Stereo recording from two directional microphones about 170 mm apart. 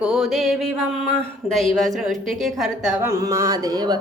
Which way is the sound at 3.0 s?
15° right (ahead or behind).